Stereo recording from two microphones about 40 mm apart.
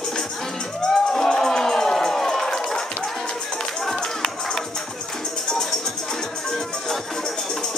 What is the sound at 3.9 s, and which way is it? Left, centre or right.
Run, centre.